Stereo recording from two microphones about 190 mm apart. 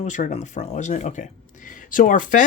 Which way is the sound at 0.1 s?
40° left (ahead or behind).